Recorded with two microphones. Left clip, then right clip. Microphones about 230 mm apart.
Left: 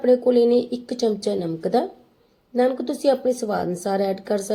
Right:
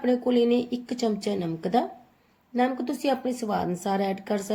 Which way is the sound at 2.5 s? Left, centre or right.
Centre.